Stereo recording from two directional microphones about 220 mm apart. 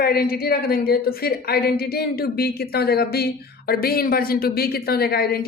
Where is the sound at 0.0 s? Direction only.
45° left (ahead or behind).